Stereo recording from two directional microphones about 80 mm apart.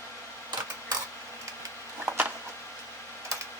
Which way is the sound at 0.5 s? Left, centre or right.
Right.